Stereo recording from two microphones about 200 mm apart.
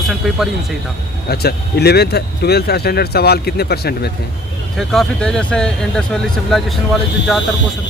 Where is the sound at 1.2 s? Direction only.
50° left (ahead or behind).